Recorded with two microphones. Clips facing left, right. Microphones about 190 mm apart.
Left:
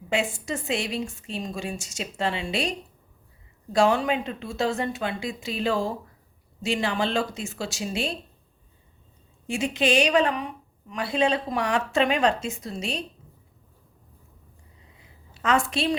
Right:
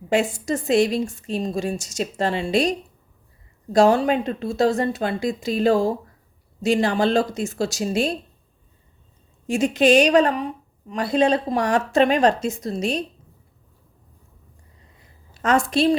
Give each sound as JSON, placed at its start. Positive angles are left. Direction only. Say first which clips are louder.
{"t": 0.1, "sound": "a woman's voice", "louder": "right 6 dB", "side_deg": -40}
{"t": 9.5, "sound": "a woman's voice", "louder": "right 7 dB", "side_deg": -40}
{"t": 15.3, "sound": "a woman's voice", "louder": "right 4 dB", "side_deg": -40}